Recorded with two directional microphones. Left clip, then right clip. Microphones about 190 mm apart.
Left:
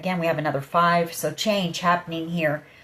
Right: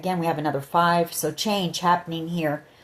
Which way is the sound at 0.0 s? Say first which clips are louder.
Left 1 dB; 50° right (ahead or behind).